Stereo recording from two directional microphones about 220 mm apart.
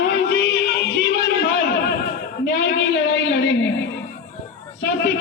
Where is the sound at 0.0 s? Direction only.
50° left (ahead or behind).